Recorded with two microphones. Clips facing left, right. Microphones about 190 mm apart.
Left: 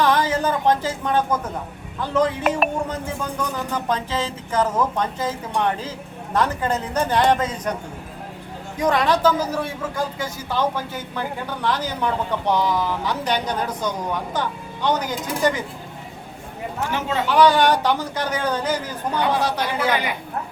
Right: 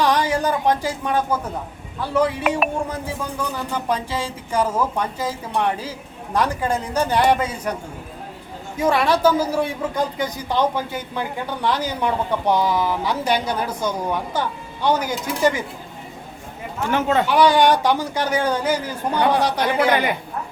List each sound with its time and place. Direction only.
0.0 s a sound: 15° right (ahead or behind)
2.0 s speech: 10° right (ahead or behind)
8.8 s speech: 10° right (ahead or behind)
16.9 s speech: 55° right (ahead or behind)
17.2 s speech: 10° right (ahead or behind)